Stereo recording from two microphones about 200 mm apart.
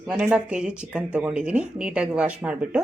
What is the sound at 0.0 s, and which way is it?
Speech, 5° right (ahead or behind).